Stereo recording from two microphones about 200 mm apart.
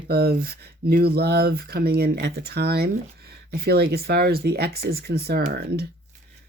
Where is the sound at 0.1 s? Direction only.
50° right (ahead or behind).